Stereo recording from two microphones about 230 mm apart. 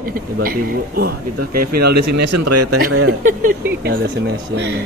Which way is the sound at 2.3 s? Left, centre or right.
Right.